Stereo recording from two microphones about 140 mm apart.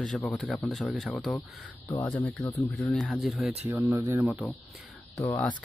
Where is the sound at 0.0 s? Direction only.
5° left (ahead or behind).